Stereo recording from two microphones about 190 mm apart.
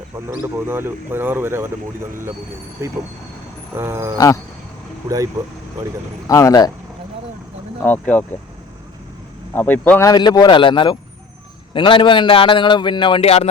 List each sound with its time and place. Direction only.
0.4 s speech: 10° right (ahead or behind)
3.8 s speech: 15° right (ahead or behind)
6.2 s speech: 20° left (ahead or behind)
7.8 s speech: 5° left (ahead or behind)
9.6 s a man's voice: 10° left (ahead or behind); by 13.5 s 35° left (ahead or behind)